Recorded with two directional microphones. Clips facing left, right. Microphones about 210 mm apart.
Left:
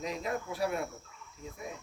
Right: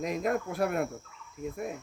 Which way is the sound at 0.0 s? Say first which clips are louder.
Right 6 dB; 50° right (ahead or behind).